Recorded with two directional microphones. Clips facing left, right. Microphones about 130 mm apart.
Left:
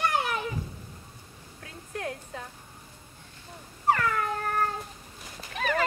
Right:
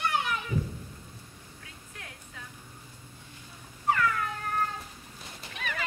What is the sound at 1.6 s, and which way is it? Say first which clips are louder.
Music: left 15 dB; 45° left (ahead or behind).